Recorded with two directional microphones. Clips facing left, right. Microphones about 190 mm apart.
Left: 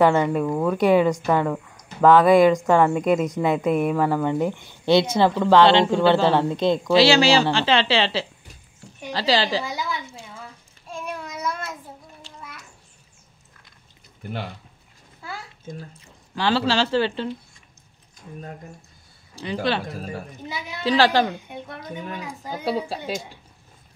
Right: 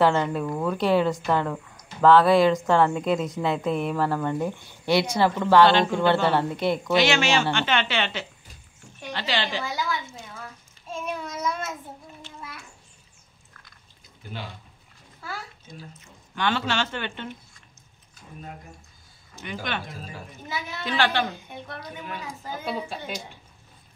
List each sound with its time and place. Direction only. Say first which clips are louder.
0.0 s a woman's voice: left 4 dB; 10° left (ahead or behind); by 9.7 s 35° left (ahead or behind)
10.9 s child singing: right 1 dB; centre (ahead or behind)
15.7 s speech: left 8 dB; 50° left (ahead or behind)
16.3 s speech: left 5 dB; 30° left (ahead or behind)
19.3 s speech: left 8 dB; 35° left (ahead or behind)
20.4 s a woman's voice: right 4 dB; 15° left (ahead or behind)
20.8 s speech: left 7 dB; 35° left (ahead or behind)
21.5 s a woman's voice: left 3 dB; 20° left (ahead or behind)
22.7 s speech: left 6 dB; 35° left (ahead or behind)